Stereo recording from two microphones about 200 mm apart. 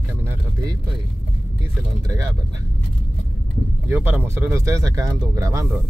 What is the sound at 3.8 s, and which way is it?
Speech, 10° right (ahead or behind).